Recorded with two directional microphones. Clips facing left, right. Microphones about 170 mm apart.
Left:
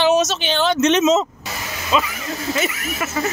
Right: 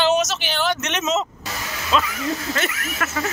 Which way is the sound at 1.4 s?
5° left (ahead or behind).